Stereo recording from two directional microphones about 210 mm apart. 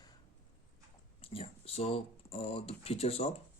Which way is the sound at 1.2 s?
25° left (ahead or behind).